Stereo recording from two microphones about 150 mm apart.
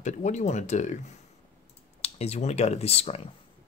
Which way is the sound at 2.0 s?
45° left (ahead or behind).